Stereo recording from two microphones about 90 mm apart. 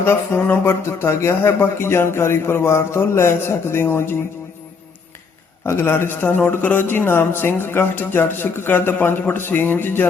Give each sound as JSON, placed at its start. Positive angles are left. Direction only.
{"t": 0.0, "sound": "a man's voice", "side_deg": 25}
{"t": 5.6, "sound": "a man's voice", "side_deg": 30}